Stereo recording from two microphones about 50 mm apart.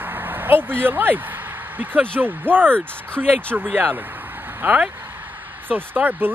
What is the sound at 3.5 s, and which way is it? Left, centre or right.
Speech, right.